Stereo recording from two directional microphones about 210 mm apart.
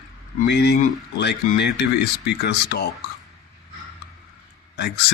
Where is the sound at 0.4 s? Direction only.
50° left (ahead or behind).